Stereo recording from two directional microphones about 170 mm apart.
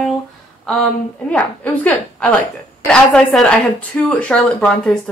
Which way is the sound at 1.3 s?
10° left (ahead or behind).